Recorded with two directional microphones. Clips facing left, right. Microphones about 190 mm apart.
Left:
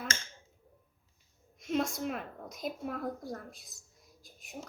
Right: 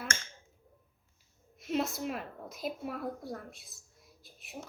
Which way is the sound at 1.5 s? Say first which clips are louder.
Left 1 dB; 5° right (ahead or behind).